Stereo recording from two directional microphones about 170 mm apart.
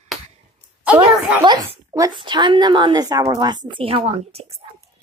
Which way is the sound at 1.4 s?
25° right (ahead or behind).